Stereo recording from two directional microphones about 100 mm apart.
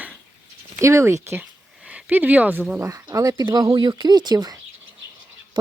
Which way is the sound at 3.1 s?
35° right (ahead or behind).